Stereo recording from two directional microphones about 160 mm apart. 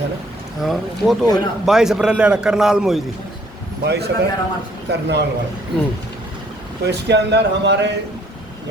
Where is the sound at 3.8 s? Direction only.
90° right.